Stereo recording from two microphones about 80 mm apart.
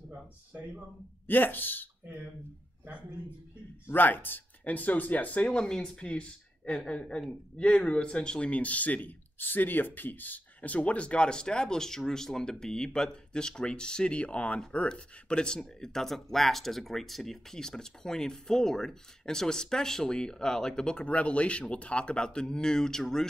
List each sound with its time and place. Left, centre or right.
1.2 s speech: left
3.8 s speech: left; by 23.2 s centre